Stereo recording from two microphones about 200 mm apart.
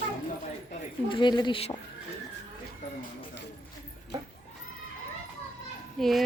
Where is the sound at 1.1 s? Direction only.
25° left (ahead or behind).